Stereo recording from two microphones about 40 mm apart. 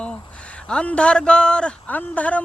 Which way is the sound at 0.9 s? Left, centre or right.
Left.